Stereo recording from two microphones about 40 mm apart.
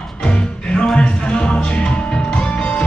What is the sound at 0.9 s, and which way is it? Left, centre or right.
Music, left.